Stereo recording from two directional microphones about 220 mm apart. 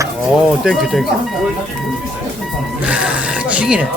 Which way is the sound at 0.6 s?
Centre (ahead or behind).